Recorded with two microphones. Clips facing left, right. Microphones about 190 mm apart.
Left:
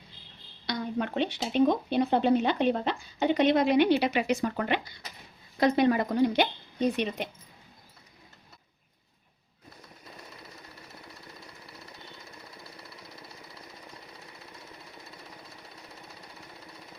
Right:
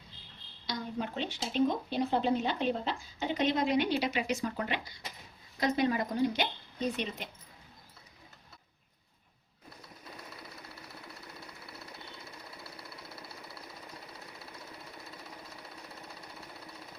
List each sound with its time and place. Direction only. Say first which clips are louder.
0.7 s speech: left 5 dB; 65° left (ahead or behind)